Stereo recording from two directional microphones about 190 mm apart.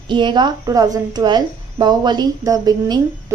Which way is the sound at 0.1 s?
25° right (ahead or behind).